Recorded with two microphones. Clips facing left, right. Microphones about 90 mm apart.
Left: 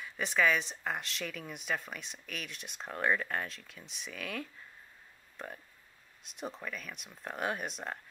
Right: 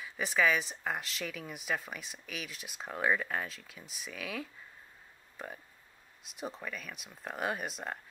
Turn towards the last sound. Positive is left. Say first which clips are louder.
# even
turn(degrees=0)  # may be behind; listen again after turning